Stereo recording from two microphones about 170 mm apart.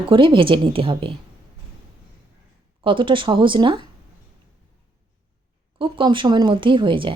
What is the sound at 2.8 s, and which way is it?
A woman's voice, 30° right (ahead or behind).